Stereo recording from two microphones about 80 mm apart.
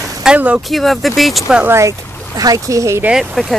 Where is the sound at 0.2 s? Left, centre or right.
Centre.